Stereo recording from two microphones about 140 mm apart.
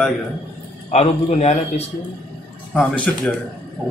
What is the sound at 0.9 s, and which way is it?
A man's voice, 50° left (ahead or behind).